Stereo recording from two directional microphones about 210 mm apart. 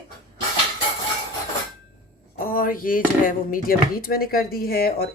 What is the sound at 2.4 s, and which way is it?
Speech, 45° left (ahead or behind).